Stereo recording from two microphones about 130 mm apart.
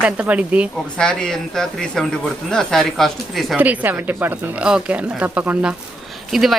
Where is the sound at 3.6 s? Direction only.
10° right (ahead or behind).